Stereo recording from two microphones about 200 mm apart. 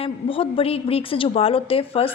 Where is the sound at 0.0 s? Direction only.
25° left (ahead or behind).